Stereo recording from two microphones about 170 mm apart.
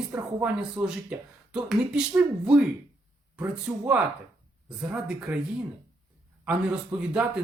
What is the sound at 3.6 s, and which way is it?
Speech, 5° right (ahead or behind).